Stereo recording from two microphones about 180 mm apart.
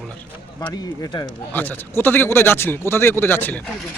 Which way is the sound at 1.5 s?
10° left (ahead or behind).